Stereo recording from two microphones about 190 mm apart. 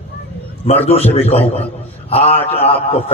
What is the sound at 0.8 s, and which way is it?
A man's voice, 30° left (ahead or behind).